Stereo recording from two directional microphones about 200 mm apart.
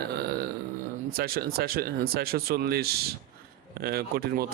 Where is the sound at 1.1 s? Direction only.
50° right (ahead or behind).